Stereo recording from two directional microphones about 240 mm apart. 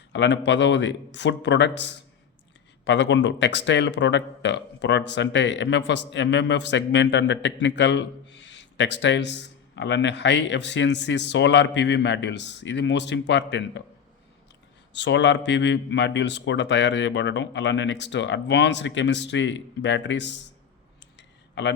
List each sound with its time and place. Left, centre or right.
0.1 s speech: left
14.9 s speech: left
21.2 s a sound: left